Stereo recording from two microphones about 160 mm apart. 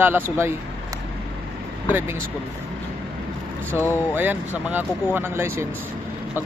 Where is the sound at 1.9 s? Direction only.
15° right (ahead or behind).